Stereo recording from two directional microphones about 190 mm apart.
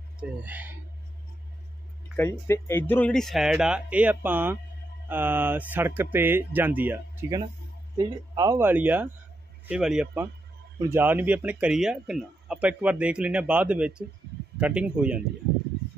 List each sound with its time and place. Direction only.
0.2 s speech: 10° right (ahead or behind)
2.1 s speech: 15° left (ahead or behind); by 15.1 s 5° right (ahead or behind)